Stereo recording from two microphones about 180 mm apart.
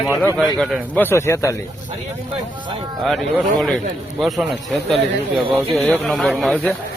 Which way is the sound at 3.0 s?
Centre (ahead or behind).